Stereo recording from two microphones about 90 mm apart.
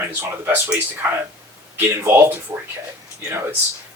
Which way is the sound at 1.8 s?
25° right (ahead or behind).